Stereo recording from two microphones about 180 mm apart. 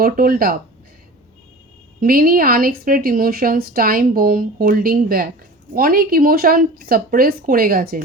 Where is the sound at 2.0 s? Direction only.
55° right (ahead or behind).